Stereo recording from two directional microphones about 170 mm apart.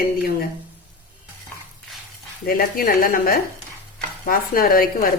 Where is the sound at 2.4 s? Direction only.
60° left (ahead or behind).